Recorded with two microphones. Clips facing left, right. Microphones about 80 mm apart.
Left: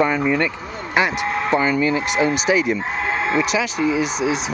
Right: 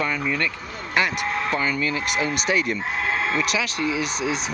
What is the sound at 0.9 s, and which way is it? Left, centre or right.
Speech, centre.